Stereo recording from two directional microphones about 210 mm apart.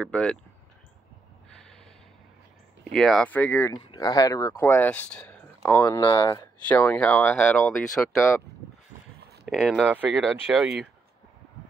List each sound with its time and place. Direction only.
0.0 s speech: 5° left (ahead or behind)
2.8 s speech: centre (ahead or behind)
3.7 s speech: 20° left (ahead or behind)
6.7 s speech: 5° left (ahead or behind)
9.5 s speech: centre (ahead or behind)